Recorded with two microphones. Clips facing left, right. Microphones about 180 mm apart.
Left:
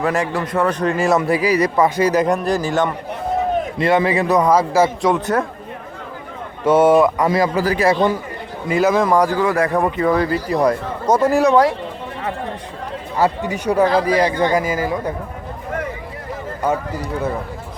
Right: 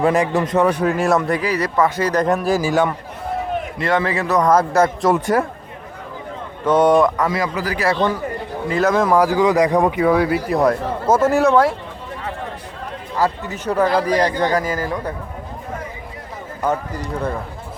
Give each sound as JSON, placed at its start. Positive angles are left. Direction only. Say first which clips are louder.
{"t": 0.0, "sound": "a man's voice", "louder": "right 3 dB", "side_deg": -20}
{"t": 1.4, "sound": "speech", "louder": "left 3 dB", "side_deg": 10}
{"t": 2.2, "sound": "speech", "louder": "even", "side_deg": -5}
{"t": 3.8, "sound": "speech", "louder": "left 3 dB", "side_deg": 15}
{"t": 4.4, "sound": "speech", "louder": "even", "side_deg": 5}
{"t": 5.2, "sound": "a man's voice", "louder": "right 1 dB", "side_deg": -10}
{"t": 6.7, "sound": "speech", "louder": "left 2 dB", "side_deg": 5}
{"t": 7.3, "sound": "a man's voice", "louder": "left 5 dB", "side_deg": 30}
{"t": 7.9, "sound": "speech", "louder": "left 1 dB", "side_deg": 15}
{"t": 8.8, "sound": "speech", "louder": "even", "side_deg": 0}
{"t": 9.4, "sound": "speech", "louder": "right 2 dB", "side_deg": -15}
{"t": 13.1, "sound": "speech", "louder": "left 2 dB", "side_deg": 15}
{"t": 16.6, "sound": "speech", "louder": "left 1 dB", "side_deg": 10}